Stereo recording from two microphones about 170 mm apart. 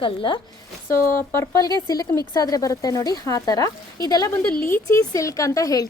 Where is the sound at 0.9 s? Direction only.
15° left (ahead or behind).